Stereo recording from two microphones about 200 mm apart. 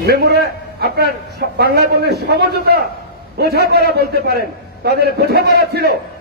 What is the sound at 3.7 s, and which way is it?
A man's voice, 55° right (ahead or behind).